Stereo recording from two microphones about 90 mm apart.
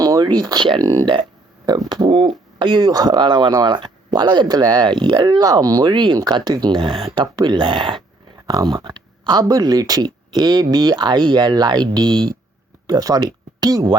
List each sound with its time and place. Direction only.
0.0 s speech: 50° right (ahead or behind)
1.9 s speech: 60° right (ahead or behind)
7.3 s speech: 55° right (ahead or behind)
8.4 s speech: 45° right (ahead or behind)
12.9 s speech: 45° right (ahead or behind)